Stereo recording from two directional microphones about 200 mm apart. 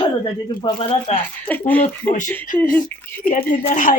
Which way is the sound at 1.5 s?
10° left (ahead or behind).